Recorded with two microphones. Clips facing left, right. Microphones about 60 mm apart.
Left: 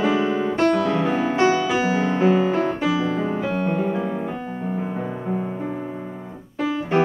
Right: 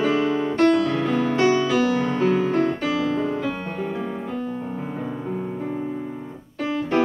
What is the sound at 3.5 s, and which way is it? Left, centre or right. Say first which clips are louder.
Music: left 6 dB; centre.